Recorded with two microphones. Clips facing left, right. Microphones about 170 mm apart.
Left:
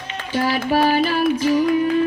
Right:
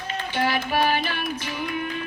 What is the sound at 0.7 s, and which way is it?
Music, 35° left (ahead or behind).